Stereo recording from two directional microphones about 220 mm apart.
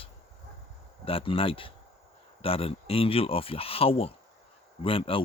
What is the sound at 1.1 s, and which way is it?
Speech, 25° left (ahead or behind).